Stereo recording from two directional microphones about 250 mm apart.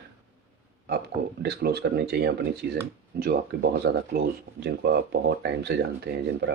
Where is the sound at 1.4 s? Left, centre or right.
Right.